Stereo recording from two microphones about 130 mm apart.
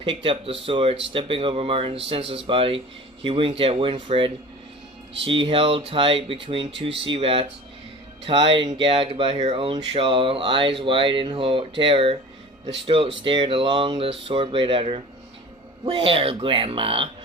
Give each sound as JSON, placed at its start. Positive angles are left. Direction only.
{"t": 0.0, "sound": "speech", "side_deg": -40}